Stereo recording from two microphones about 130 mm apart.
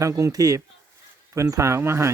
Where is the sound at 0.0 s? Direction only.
25° right (ahead or behind).